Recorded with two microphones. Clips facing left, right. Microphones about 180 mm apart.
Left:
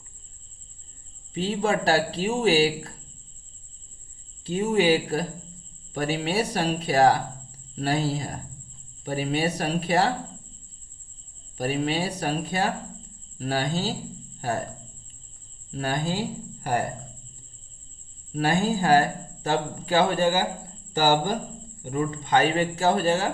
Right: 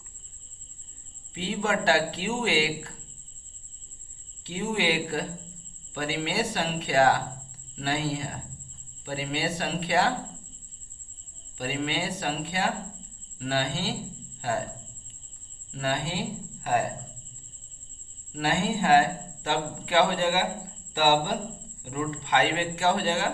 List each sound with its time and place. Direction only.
1.3 s speech: 35° left (ahead or behind)
4.4 s speech: 40° left (ahead or behind)
11.5 s speech: 40° left (ahead or behind)
15.7 s speech: 40° left (ahead or behind)
18.3 s speech: 40° left (ahead or behind)